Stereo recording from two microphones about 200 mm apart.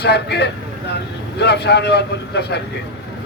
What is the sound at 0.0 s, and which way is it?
A man's voice, 55° left (ahead or behind).